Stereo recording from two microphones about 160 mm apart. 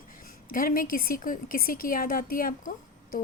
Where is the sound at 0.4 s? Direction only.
60° left (ahead or behind).